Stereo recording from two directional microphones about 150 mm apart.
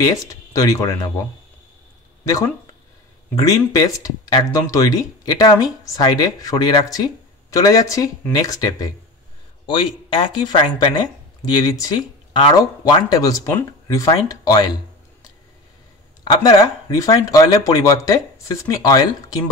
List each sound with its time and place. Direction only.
0.0 s speech: 25° left (ahead or behind)
2.2 s speech: 20° left (ahead or behind)
9.7 s speech: 35° left (ahead or behind)
16.3 s speech: 25° left (ahead or behind)